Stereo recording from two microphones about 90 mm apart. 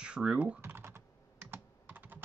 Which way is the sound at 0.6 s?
25° right (ahead or behind).